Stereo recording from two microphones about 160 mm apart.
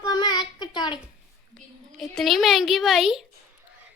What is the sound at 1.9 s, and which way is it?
Speech, centre (ahead or behind).